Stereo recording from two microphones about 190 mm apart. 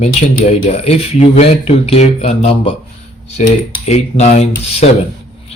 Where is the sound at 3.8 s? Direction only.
35° left (ahead or behind).